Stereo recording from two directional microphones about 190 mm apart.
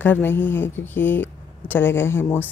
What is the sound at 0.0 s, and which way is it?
A woman's voice, 10° left (ahead or behind).